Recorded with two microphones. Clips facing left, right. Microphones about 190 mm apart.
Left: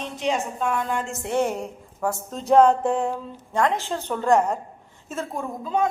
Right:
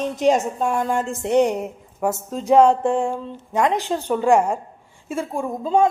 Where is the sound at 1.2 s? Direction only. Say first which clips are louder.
Right 7 dB; 15° right (ahead or behind).